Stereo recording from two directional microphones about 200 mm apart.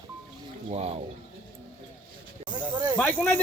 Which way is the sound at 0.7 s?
30° right (ahead or behind).